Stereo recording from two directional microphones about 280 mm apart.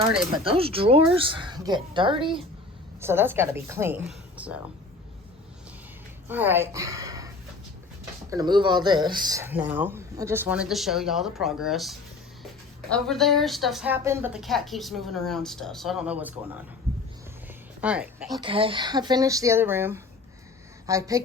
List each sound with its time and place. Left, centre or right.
0.4 s speech: centre
6.2 s a woman's voice: centre
8.3 s speech: centre
17.7 s a woman's voice: centre
18.3 s a woman's voice: centre